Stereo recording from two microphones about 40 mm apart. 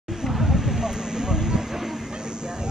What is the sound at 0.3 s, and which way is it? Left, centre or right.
Vehicle, centre.